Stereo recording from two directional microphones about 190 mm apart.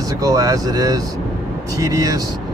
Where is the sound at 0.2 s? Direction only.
20° right (ahead or behind).